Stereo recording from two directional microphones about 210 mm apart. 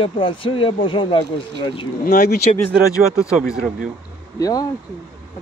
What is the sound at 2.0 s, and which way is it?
Speech, 50° left (ahead or behind).